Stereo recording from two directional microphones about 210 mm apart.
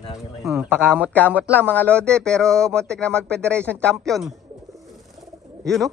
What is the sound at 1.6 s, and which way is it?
Speech, 5° left (ahead or behind).